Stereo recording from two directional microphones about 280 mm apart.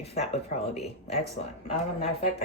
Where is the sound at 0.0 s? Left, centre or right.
Left.